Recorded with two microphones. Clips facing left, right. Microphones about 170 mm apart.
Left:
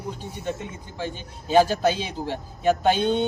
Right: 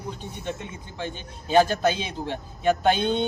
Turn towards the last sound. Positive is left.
turn(degrees=10)  # may be behind; listen again after turning